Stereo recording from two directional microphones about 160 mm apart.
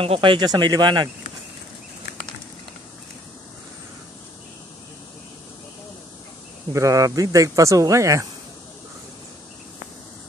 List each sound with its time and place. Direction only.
0.0 s speech: 35° right (ahead or behind)
6.7 s speech: 20° right (ahead or behind)